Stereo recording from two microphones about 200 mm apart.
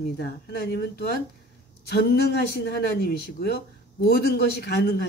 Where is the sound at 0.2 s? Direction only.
55° left (ahead or behind).